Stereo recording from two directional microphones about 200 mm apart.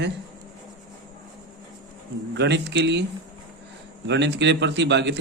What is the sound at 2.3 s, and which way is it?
Speech, 60° right (ahead or behind).